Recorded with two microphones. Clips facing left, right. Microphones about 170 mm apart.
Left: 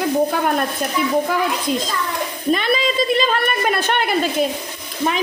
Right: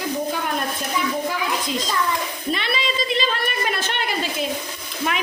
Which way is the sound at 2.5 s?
45° left (ahead or behind).